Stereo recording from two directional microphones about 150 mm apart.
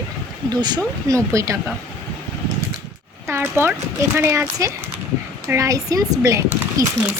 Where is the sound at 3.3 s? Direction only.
15° right (ahead or behind).